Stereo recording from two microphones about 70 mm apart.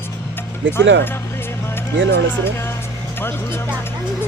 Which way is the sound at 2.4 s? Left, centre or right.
Left.